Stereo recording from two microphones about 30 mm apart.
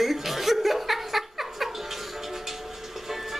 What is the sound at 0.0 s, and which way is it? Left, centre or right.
Chuckle, centre.